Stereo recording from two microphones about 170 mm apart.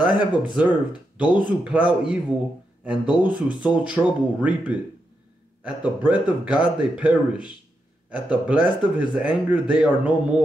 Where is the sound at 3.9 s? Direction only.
10° right (ahead or behind).